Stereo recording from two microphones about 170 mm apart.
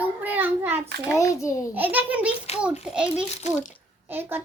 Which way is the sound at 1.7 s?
10° right (ahead or behind).